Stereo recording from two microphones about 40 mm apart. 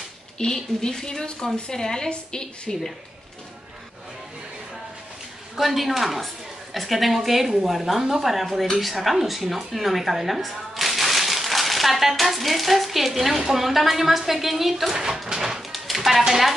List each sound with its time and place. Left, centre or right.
0.4 s a woman's voice: left
5.6 s a woman's voice: centre